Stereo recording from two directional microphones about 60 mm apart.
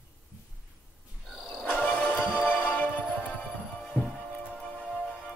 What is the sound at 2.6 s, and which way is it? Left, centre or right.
Music, left.